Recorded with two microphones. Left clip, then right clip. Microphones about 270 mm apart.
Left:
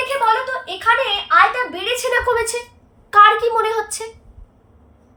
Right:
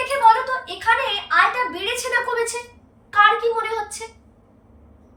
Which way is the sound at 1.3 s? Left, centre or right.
Centre.